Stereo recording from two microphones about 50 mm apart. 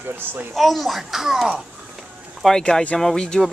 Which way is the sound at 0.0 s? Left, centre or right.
Right.